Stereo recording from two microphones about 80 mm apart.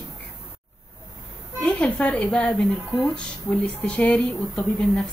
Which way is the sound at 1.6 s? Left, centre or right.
Centre.